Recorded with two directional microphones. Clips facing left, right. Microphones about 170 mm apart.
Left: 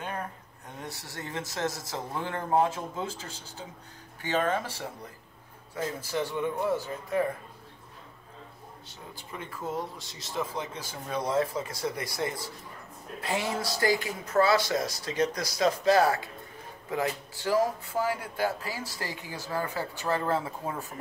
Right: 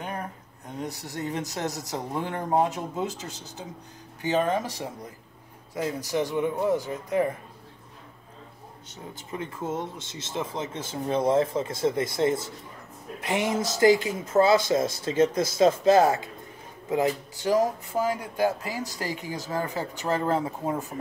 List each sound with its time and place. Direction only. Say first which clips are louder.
0.0 s a sound: right 2 dB; 15° right (ahead or behind)
0.7 s speech: right 7 dB; 15° right (ahead or behind)
9.1 s speech: right 6 dB; 25° right (ahead or behind)